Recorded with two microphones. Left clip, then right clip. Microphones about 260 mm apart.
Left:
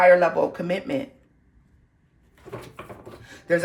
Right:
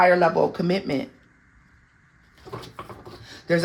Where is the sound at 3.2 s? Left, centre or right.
Right.